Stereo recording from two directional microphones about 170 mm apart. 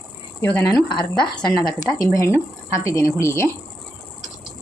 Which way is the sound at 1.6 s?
20° left (ahead or behind).